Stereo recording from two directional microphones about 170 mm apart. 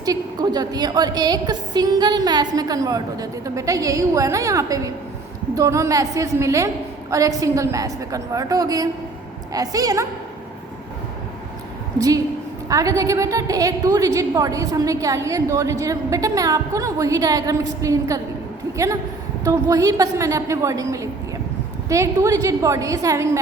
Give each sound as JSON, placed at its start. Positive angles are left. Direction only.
{"t": 0.0, "sound": "a woman's voice", "side_deg": -20}
{"t": 11.9, "sound": "a woman's voice", "side_deg": -20}
{"t": 19.5, "sound": "a woman's voice", "side_deg": -20}